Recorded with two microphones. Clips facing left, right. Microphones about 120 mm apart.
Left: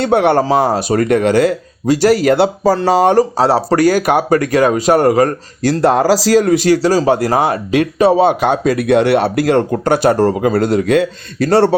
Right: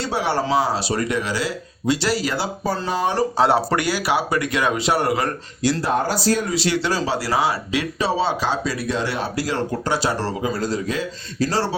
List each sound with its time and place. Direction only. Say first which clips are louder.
0.0 s speech: left 10 dB; 60° left (ahead or behind); by 3.2 s 75° left (ahead or behind)
3.2 s speech: left 6 dB; 35° left (ahead or behind)
5.8 s speech: left 13 dB; 90° left
6.5 s speech: left 10 dB; 45° left (ahead or behind); by 11.7 s 60° left (ahead or behind)